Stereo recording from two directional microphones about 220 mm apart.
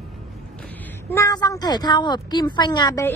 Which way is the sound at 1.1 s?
15° left (ahead or behind).